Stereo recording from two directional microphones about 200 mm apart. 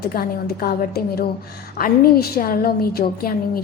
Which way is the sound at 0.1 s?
45° left (ahead or behind).